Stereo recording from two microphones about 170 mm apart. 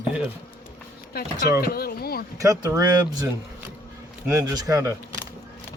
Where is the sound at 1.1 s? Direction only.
70° left (ahead or behind).